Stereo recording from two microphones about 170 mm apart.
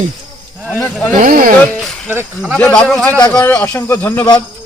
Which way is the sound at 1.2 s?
55° right (ahead or behind).